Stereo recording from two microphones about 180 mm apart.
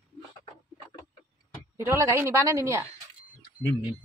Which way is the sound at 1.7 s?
15° right (ahead or behind).